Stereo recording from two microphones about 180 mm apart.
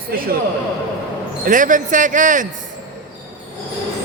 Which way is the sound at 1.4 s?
45° right (ahead or behind).